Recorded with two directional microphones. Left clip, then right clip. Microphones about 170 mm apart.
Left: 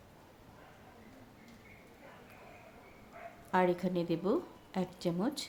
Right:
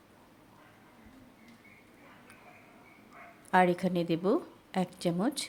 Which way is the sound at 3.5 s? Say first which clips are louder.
Right 5 dB; 30° right (ahead or behind).